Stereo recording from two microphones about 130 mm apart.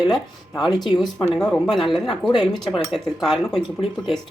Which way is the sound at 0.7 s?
35° left (ahead or behind).